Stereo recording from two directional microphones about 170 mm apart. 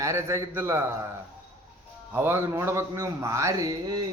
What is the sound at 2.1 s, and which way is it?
A man's voice, 15° right (ahead or behind).